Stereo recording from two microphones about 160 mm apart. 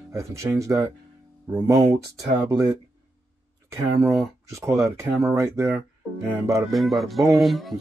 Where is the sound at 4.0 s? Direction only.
15° right (ahead or behind).